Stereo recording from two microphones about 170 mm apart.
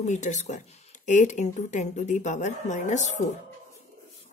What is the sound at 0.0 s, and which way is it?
A woman's voice, 45° left (ahead or behind).